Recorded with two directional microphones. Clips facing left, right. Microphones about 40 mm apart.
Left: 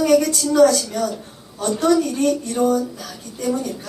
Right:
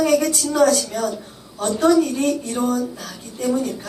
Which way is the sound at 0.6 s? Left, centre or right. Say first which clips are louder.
Left 2 dB; right.